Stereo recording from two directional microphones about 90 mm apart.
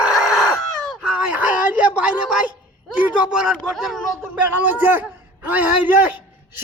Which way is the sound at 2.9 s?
10° right (ahead or behind).